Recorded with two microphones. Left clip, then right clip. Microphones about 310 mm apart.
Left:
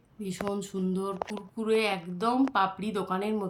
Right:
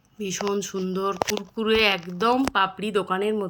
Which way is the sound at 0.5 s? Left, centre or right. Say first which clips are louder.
Right 6 dB; centre.